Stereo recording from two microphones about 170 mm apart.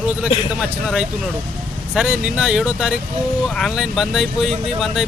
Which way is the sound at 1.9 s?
5° right (ahead or behind).